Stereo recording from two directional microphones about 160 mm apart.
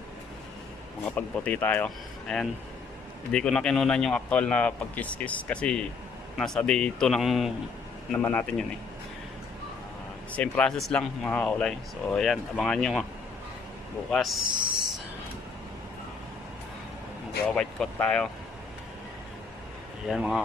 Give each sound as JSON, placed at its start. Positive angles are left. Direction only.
{"t": 1.0, "sound": "speech", "side_deg": 10}
{"t": 8.2, "sound": "speech", "side_deg": 10}
{"t": 10.3, "sound": "speech", "side_deg": 10}
{"t": 14.1, "sound": "speech", "side_deg": 0}
{"t": 17.5, "sound": "speech", "side_deg": 5}
{"t": 20.1, "sound": "speech", "side_deg": 0}